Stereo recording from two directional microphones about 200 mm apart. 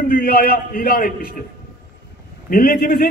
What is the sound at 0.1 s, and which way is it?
A man's voice, 45° left (ahead or behind).